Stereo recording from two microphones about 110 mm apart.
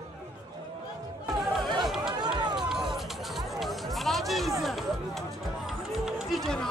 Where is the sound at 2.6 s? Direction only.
5° right (ahead or behind).